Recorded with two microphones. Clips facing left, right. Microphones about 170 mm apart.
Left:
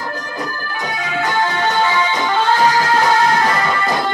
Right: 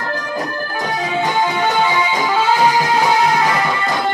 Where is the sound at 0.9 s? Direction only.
30° right (ahead or behind).